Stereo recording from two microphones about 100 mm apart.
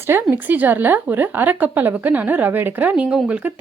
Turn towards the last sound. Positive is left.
turn(degrees=-10)  # may be behind; listen again after turning